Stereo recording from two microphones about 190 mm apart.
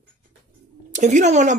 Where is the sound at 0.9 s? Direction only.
40° right (ahead or behind).